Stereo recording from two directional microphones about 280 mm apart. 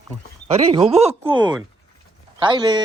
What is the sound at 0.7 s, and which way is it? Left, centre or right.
Speech, right.